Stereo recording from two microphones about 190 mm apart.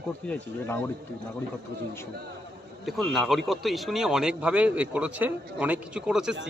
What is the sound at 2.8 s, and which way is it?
Speech, centre (ahead or behind).